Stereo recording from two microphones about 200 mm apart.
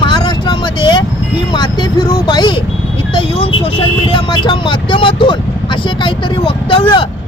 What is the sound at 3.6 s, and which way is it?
Speech, 25° left (ahead or behind).